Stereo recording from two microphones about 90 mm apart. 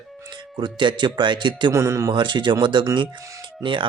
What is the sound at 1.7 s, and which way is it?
Speech, 35° right (ahead or behind).